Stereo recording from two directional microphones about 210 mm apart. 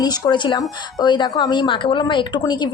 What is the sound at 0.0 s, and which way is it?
A woman's voice, 20° left (ahead or behind).